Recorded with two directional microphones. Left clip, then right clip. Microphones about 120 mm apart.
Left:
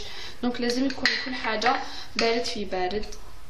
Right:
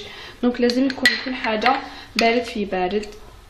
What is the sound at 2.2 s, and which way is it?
Speech, 25° right (ahead or behind).